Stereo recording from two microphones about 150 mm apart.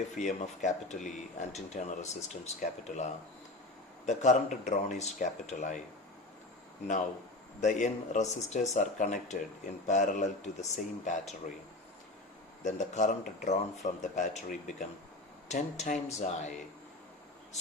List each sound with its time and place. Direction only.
0.2 s speech: 55° left (ahead or behind)
7.6 s speech: 55° left (ahead or behind)
12.6 s speech: 55° left (ahead or behind)